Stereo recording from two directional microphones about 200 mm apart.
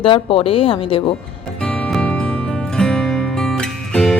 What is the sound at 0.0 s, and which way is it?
A woman's voice, 25° left (ahead or behind).